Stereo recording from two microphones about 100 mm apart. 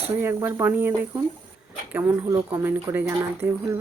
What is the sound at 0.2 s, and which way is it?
Speech, 25° right (ahead or behind).